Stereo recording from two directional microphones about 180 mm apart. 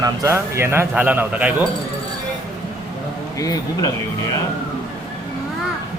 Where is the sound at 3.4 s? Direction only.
20° left (ahead or behind).